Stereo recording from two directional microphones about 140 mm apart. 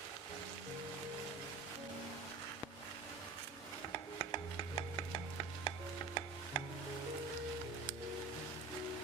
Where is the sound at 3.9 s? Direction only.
30° left (ahead or behind).